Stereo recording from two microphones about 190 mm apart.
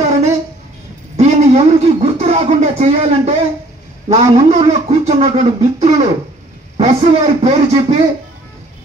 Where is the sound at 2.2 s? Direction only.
35° right (ahead or behind).